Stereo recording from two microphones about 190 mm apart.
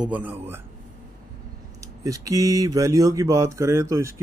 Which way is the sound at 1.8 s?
20° right (ahead or behind).